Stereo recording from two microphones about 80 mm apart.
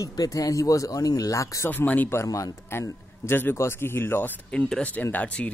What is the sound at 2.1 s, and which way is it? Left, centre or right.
A man's voice, left.